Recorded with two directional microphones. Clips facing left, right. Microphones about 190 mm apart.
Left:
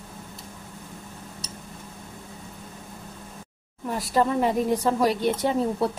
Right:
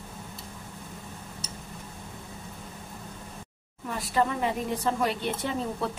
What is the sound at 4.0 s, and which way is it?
Speech, 40° left (ahead or behind).